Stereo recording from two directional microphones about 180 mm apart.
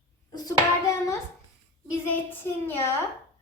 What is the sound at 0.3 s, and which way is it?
Speech, 20° left (ahead or behind).